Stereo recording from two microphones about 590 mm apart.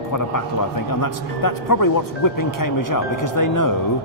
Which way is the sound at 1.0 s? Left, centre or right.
Left.